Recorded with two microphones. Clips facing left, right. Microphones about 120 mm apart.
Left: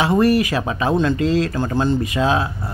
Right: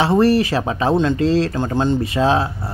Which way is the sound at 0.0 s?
30° right (ahead or behind).